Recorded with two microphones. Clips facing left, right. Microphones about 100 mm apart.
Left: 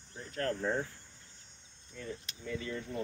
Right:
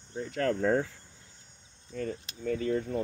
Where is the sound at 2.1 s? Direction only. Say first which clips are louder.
Right 4 dB; 40° right (ahead or behind).